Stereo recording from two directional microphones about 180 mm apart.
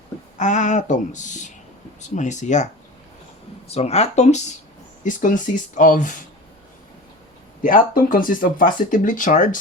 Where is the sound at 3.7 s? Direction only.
35° left (ahead or behind).